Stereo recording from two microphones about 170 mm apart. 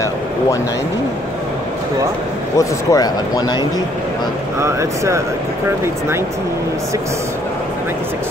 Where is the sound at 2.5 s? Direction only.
20° left (ahead or behind).